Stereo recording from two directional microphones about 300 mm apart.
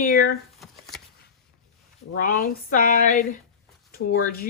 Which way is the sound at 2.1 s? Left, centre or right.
Left.